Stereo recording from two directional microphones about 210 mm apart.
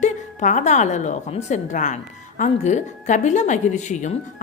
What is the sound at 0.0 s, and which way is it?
A woman's voice, 35° left (ahead or behind).